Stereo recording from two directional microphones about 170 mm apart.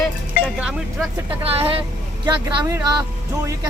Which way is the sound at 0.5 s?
5° right (ahead or behind).